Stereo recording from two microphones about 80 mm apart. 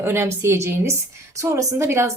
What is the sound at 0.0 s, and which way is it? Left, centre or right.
A woman's voice, right.